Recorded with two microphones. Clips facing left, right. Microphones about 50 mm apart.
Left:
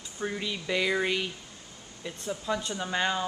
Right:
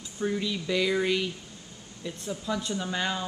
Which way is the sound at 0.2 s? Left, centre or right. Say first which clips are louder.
Right 4 dB; centre.